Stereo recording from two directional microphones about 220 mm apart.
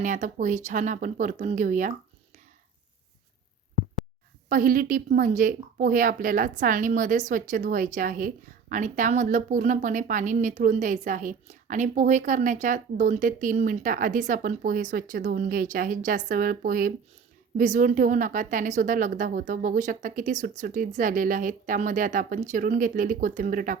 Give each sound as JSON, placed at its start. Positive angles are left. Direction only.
{"t": 0.0, "sound": "a woman's voice", "side_deg": -35}
{"t": 4.4, "sound": "a woman's voice", "side_deg": -40}